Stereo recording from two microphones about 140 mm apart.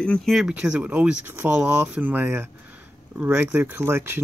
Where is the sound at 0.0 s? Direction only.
5° left (ahead or behind).